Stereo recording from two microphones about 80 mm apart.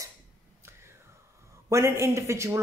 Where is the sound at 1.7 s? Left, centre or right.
Right.